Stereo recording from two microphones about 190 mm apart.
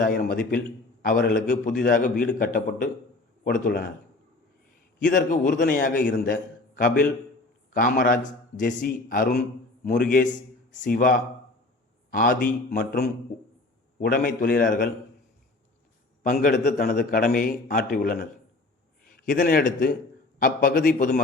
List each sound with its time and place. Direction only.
0.0 s a man's voice: 50° left (ahead or behind)
5.0 s a man's voice: 45° left (ahead or behind)
12.1 s a man's voice: 45° left (ahead or behind)
12.8 s a man's voice: 60° left (ahead or behind)
16.2 s a man's voice: 45° left (ahead or behind)